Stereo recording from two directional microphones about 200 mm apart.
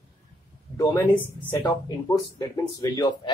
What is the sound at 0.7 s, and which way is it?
Speech, 10° left (ahead or behind).